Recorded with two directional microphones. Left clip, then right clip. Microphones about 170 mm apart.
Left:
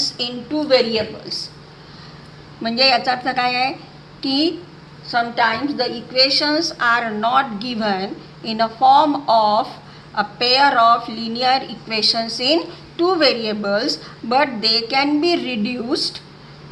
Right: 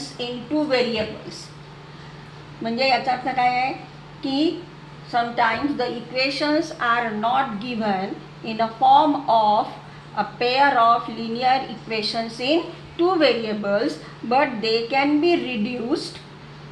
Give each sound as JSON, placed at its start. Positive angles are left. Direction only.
{"t": 2.6, "sound": "a woman's voice", "side_deg": 15}